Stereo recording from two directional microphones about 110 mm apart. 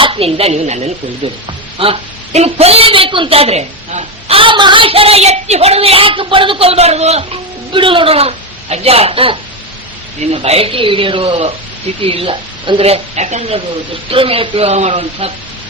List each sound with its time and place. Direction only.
0.0 s a woman's voice: 55° right (ahead or behind); by 0.9 s 90° right
1.2 s a woman's voice: 60° right (ahead or behind)
7.7 s a woman's voice: 50° right (ahead or behind)
10.4 s a woman's voice: 65° right (ahead or behind)
12.8 s a woman's voice: 80° right
14.1 s a woman's voice: 55° right (ahead or behind)
14.7 s speech: 90° right